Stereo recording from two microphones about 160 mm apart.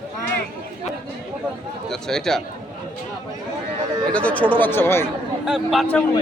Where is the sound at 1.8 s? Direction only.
5° left (ahead or behind).